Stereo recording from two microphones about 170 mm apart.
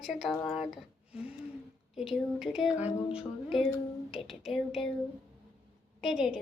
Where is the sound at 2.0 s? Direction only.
Centre (ahead or behind).